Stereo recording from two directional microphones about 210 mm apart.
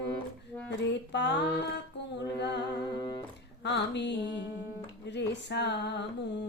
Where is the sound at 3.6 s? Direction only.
55° left (ahead or behind).